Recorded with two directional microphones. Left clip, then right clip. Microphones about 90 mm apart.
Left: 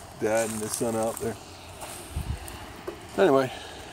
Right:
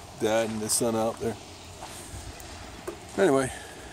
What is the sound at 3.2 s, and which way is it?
Speech, 45° right (ahead or behind).